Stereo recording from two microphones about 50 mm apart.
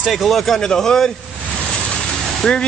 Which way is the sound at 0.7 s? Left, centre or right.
Centre.